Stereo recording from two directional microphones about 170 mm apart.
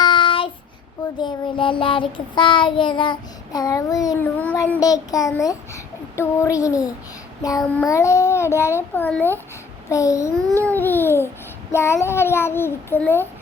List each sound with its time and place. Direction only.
0.0 s child singing: 30° left (ahead or behind)
4.4 s a child's voice: 10° left (ahead or behind)
4.8 s child singing: 20° left (ahead or behind)
7.9 s a child's voice: 15° left (ahead or behind)
9.9 s child singing: 20° left (ahead or behind)
10.6 s a child's voice: 10° left (ahead or behind)